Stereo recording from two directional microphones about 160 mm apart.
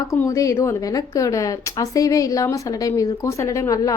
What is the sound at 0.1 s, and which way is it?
A woman's voice, 20° left (ahead or behind).